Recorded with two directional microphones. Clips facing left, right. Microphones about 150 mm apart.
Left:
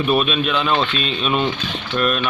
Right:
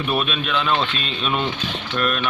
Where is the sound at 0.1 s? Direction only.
15° left (ahead or behind).